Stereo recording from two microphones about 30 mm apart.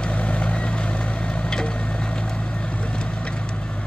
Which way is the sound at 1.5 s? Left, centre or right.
Left.